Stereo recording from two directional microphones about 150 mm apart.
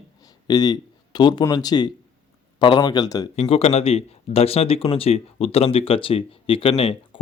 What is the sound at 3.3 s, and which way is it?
Speech, 40° left (ahead or behind).